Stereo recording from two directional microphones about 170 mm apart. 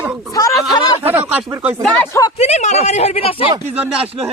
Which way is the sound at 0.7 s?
25° left (ahead or behind).